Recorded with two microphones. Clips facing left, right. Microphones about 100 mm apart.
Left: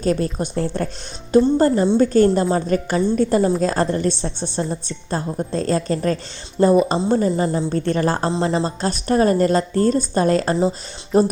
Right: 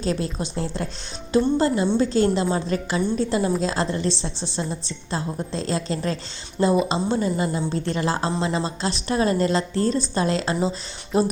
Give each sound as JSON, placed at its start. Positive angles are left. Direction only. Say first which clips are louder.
{"t": 0.0, "sound": "a woman's voice", "louder": "left 5 dB", "side_deg": 45}
{"t": 2.0, "sound": "a woman's voice", "louder": "left 6 dB", "side_deg": 50}
{"t": 7.7, "sound": "a woman's voice", "louder": "left 5 dB", "side_deg": 50}